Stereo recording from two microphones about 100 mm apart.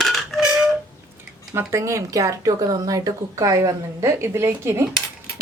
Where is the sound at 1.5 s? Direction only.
25° right (ahead or behind).